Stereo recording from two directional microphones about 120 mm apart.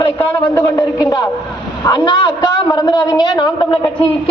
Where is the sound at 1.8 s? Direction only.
40° left (ahead or behind).